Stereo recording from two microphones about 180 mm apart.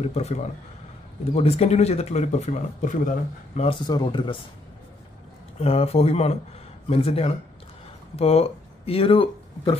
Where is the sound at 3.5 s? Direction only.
30° left (ahead or behind).